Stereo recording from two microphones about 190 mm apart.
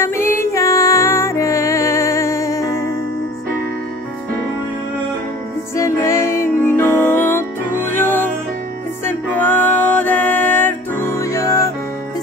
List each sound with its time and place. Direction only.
0.0 s music: 15° left (ahead or behind)
5.8 s music: 15° left (ahead or behind)